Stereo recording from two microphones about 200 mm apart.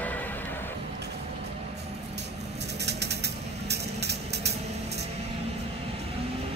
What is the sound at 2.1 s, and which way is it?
Vehicle, 60° right (ahead or behind).